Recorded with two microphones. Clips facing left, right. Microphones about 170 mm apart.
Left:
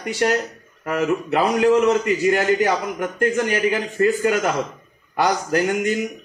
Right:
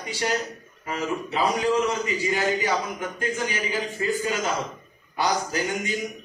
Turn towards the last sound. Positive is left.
turn(degrees=60)  # may be behind; listen again after turning